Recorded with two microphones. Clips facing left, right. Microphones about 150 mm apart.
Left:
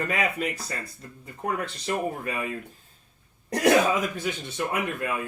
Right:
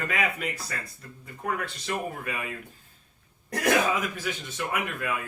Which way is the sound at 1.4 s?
30° left (ahead or behind).